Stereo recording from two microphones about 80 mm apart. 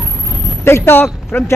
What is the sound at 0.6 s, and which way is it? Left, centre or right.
Speech, left.